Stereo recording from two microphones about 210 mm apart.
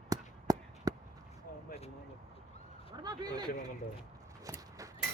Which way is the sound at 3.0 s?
20° right (ahead or behind).